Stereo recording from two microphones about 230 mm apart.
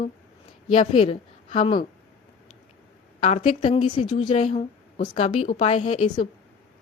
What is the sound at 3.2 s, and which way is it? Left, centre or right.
A woman's voice, left.